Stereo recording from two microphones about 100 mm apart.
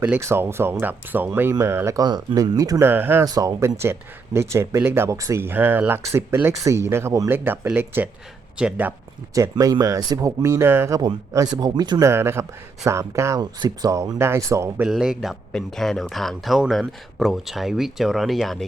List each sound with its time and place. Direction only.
0.2 s speech: 25° right (ahead or behind)
2.0 s speech: 40° right (ahead or behind)
2.8 s speech: 20° right (ahead or behind)
3.2 s speech: 35° right (ahead or behind); by 8.9 s 10° right (ahead or behind)
9.3 s speech: 35° right (ahead or behind)
11.3 s speech: 40° right (ahead or behind)
12.0 s speech: 25° right (ahead or behind)
13.4 s speech: 40° right (ahead or behind)
14.8 s speech: 5° right (ahead or behind)